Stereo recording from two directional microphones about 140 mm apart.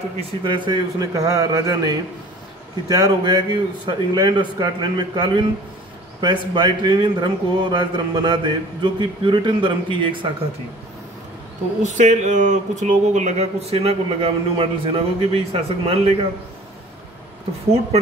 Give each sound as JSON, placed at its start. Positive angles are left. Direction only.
{"t": 0.2, "sound": "a man's voice", "side_deg": -35}
{"t": 11.8, "sound": "speech", "side_deg": -60}